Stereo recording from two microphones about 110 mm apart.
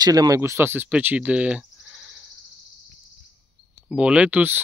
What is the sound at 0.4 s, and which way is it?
Speech, 20° right (ahead or behind).